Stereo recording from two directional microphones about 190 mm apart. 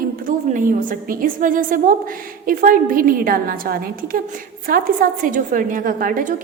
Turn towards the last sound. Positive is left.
turn(degrees=-45)  # may be behind; listen again after turning